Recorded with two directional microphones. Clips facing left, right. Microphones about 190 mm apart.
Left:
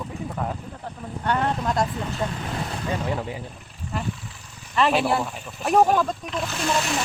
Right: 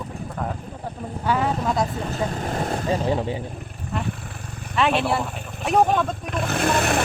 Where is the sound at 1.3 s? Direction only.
5° right (ahead or behind).